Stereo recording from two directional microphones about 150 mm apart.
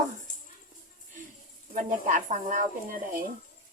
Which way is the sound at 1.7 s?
60° right (ahead or behind).